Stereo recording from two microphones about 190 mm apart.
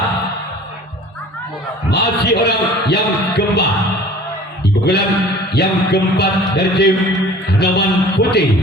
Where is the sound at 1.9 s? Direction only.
60° left (ahead or behind).